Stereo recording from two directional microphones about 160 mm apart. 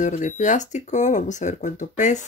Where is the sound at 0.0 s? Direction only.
50° left (ahead or behind).